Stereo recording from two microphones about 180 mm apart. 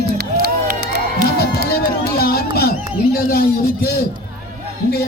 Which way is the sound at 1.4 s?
60° left (ahead or behind).